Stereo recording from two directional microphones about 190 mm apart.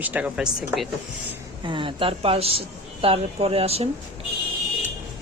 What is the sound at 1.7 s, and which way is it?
A woman's voice, 25° right (ahead or behind).